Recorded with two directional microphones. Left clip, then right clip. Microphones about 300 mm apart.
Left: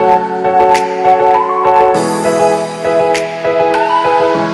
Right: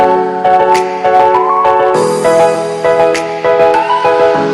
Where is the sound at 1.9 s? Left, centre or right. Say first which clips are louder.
Right 3 dB; centre.